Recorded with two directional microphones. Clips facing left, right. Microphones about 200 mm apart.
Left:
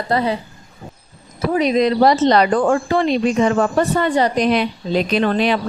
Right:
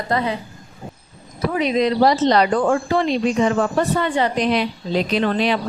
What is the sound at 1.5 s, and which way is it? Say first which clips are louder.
A woman's voice: left 3 dB; 40° left (ahead or behind).